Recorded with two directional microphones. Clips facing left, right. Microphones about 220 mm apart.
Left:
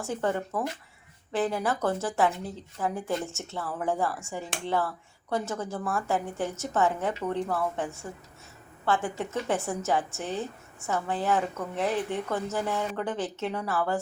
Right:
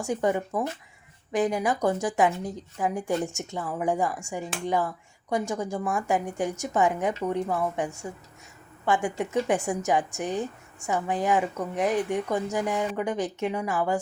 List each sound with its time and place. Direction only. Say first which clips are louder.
0.0 s a woman's voice: right 3 dB; 15° right (ahead or behind)